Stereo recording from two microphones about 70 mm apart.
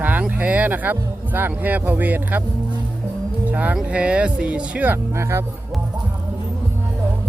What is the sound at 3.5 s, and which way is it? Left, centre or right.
Speech, right.